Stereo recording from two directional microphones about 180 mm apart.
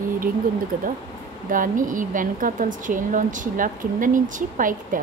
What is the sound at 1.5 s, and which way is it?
A woman's voice, 50° right (ahead or behind).